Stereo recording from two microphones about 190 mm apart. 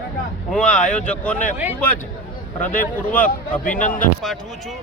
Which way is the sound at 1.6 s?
10° right (ahead or behind).